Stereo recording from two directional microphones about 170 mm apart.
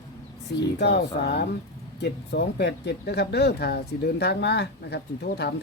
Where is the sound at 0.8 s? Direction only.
80° left.